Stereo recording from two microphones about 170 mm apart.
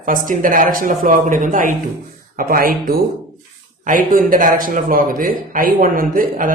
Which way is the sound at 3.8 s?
50° right (ahead or behind).